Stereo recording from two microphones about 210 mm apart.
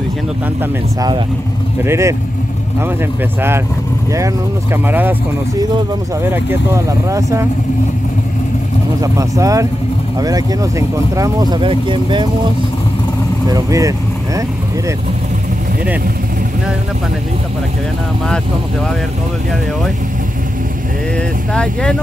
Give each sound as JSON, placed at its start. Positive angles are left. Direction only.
{"t": 1.8, "sound": "speech", "side_deg": -15}
{"t": 4.8, "sound": "speech", "side_deg": -10}
{"t": 6.2, "sound": "speech", "side_deg": -10}
{"t": 9.0, "sound": "speech", "side_deg": -15}
{"t": 13.5, "sound": "speech", "side_deg": -15}